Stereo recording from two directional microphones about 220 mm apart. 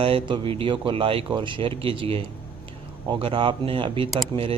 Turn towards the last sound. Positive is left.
turn(degrees=-20)  # may be behind; listen again after turning